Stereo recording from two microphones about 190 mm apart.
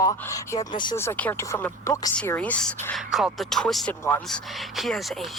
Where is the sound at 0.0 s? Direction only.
20° left (ahead or behind).